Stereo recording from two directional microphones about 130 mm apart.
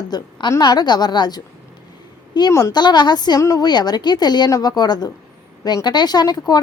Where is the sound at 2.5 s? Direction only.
20° left (ahead or behind).